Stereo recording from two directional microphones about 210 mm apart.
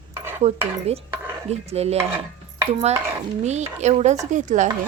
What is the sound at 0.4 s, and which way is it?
Speech, 30° right (ahead or behind).